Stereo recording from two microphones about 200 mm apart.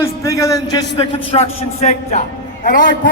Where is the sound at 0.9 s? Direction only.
30° left (ahead or behind).